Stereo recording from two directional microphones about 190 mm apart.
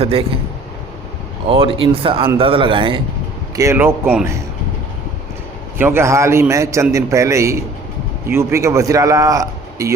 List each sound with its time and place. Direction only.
0.0 s speech: 30° right (ahead or behind)
1.5 s speech: 30° right (ahead or behind)
3.5 s a man's voice: 15° right (ahead or behind)
4.0 s a man's voice: 5° right (ahead or behind)
5.7 s a man's voice: 10° right (ahead or behind)